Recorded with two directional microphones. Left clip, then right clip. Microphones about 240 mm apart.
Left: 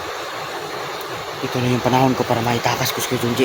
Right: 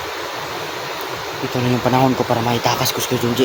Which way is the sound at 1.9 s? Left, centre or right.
Centre.